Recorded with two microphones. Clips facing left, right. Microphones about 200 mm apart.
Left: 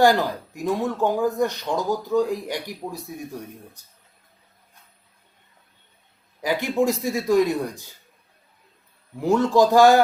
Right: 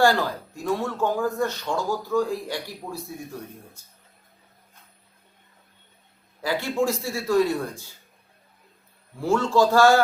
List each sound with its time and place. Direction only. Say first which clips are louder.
0.0 s speech: left 2 dB; 15° left (ahead or behind)
6.4 s speech: left 3 dB; 15° left (ahead or behind)
9.2 s speech: left 3 dB; 20° left (ahead or behind)